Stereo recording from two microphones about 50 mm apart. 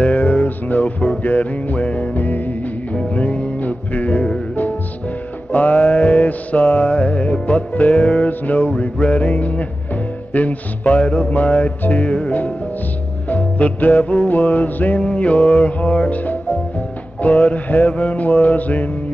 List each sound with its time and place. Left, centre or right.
0.7 s music: left
1.2 s mantra: left
2.1 s music: left
2.9 s music: left
4.1 s music: centre
5.5 s mantra: left
7.0 s music: left
15.1 s mantra: left
16.1 s music: left
17.2 s mantra: left